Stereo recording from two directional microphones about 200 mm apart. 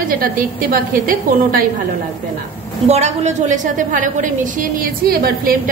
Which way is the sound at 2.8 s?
35° right (ahead or behind).